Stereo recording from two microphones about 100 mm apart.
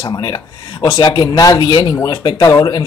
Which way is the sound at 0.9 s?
55° left (ahead or behind).